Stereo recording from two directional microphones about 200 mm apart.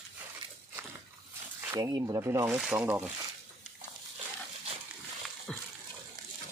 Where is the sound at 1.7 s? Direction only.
20° right (ahead or behind).